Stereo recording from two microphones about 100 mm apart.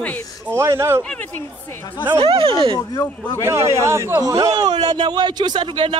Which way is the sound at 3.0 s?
30° left (ahead or behind).